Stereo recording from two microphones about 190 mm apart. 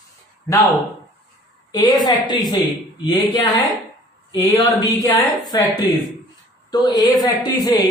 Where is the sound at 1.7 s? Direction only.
20° left (ahead or behind).